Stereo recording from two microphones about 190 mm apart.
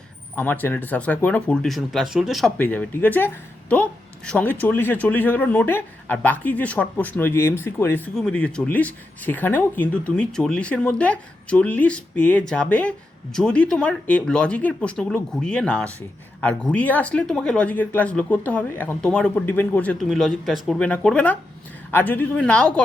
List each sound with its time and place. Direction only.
0.3 s speech: 10° left (ahead or behind)